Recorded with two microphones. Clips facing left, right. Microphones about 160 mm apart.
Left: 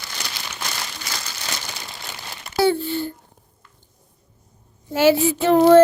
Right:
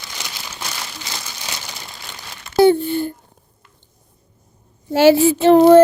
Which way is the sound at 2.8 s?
50° right (ahead or behind).